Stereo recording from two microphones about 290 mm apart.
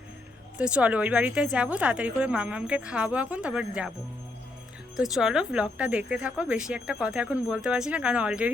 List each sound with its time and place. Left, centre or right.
0.6 s speech: centre
4.9 s speech: centre